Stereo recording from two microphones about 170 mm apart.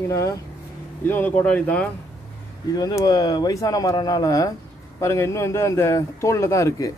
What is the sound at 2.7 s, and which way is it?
A man's voice, 20° left (ahead or behind).